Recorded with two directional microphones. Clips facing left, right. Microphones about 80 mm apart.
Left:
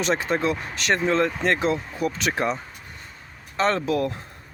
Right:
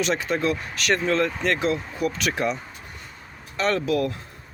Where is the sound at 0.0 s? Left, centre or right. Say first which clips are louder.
Left 1 dB; left.